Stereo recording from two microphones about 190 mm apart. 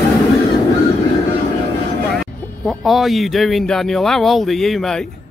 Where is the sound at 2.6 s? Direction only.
Centre (ahead or behind).